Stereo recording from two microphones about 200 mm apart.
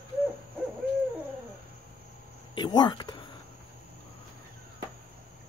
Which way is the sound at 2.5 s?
20° left (ahead or behind).